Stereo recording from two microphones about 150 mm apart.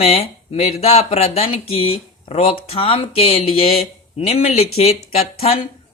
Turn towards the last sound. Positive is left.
turn(degrees=45)  # may be behind; listen again after turning